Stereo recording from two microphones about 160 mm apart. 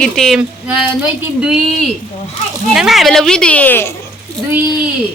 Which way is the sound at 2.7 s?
Centre (ahead or behind).